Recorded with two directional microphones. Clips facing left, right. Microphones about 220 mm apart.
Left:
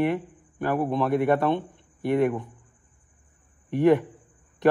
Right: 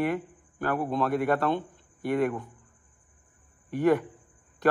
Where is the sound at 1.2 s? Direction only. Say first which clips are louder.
Left 3 dB; 20° left (ahead or behind).